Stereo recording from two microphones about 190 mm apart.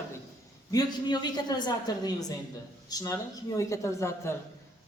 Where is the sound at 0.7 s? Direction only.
20° left (ahead or behind).